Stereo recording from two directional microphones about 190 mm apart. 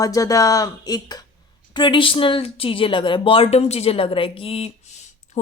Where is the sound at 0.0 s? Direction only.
20° left (ahead or behind).